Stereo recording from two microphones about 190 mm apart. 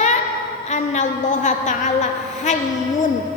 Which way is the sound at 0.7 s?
40° left (ahead or behind).